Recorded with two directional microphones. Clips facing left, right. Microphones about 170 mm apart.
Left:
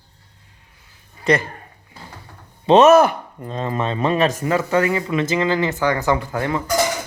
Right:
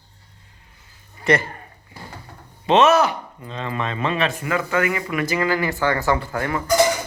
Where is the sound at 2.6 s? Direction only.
40° left (ahead or behind); by 6.6 s 20° left (ahead or behind).